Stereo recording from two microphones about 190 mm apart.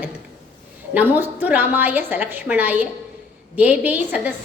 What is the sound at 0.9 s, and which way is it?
A woman's voice, 10° right (ahead or behind).